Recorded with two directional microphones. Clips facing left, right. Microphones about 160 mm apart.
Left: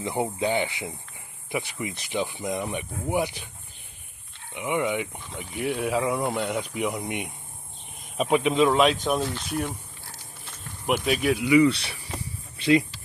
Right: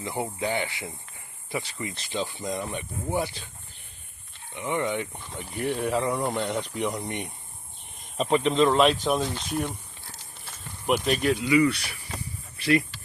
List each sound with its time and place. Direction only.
0.0 s speech: 20° left (ahead or behind)
4.5 s speech: 15° left (ahead or behind)
10.4 s insect: 5° left (ahead or behind)
11.4 s speech: 20° left (ahead or behind)